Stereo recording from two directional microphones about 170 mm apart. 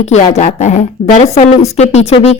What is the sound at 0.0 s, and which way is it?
Speech, 45° left (ahead or behind).